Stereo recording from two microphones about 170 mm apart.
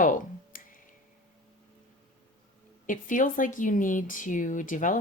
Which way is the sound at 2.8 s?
50° left (ahead or behind).